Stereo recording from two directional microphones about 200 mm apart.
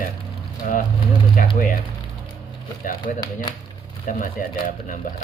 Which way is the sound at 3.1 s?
40° left (ahead or behind).